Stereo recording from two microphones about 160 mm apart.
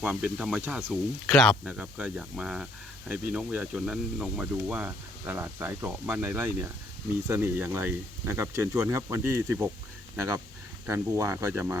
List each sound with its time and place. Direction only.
0.0 s speech: 5° right (ahead or behind)
1.3 s speech: centre (ahead or behind); by 11.8 s 15° right (ahead or behind)